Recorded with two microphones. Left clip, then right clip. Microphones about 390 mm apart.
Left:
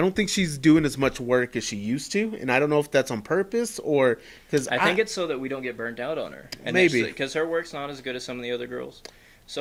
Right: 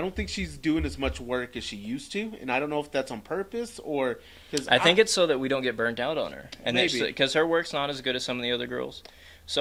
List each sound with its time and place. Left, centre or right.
0.0 s speech: left
4.7 s speech: centre